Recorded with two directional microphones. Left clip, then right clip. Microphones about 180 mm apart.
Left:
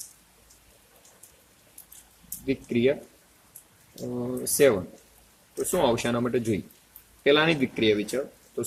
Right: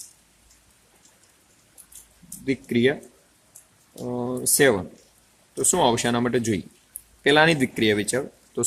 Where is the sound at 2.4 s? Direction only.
50° right (ahead or behind).